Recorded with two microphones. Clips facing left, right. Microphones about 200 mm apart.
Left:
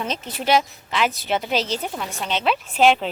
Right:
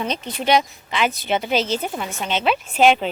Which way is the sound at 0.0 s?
5° left (ahead or behind).